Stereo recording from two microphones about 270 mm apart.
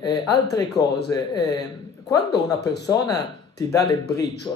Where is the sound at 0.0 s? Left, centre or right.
Centre.